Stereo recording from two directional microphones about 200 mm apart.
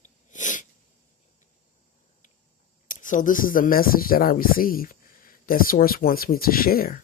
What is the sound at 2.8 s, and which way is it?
Speech, 40° left (ahead or behind).